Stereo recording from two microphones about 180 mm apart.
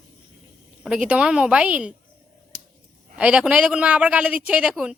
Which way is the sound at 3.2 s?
5° right (ahead or behind).